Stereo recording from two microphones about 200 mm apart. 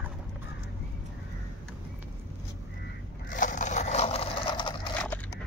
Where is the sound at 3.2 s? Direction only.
40° left (ahead or behind); by 4.9 s 25° left (ahead or behind).